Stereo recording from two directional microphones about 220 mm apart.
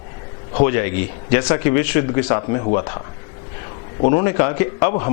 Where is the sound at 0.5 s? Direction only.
15° left (ahead or behind).